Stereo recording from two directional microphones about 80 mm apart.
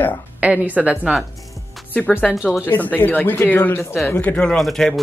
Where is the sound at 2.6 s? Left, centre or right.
Left.